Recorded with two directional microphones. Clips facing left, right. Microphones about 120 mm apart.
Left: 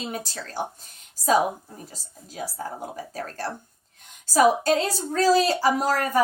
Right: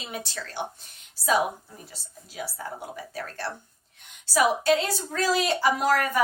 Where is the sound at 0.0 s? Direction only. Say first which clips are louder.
Left 3 dB; 40° left (ahead or behind).